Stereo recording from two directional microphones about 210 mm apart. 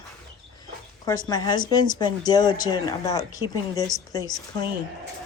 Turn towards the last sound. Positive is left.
turn(degrees=20)  # may be behind; listen again after turning